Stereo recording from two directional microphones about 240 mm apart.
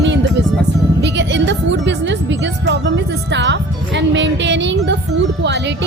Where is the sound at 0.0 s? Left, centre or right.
Right.